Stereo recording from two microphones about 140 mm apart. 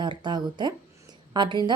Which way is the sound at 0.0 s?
30° right (ahead or behind).